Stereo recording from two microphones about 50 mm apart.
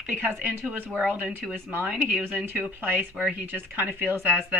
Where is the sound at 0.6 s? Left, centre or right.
Right.